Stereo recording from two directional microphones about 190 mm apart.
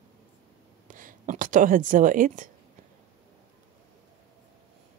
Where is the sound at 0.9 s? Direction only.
45° right (ahead or behind).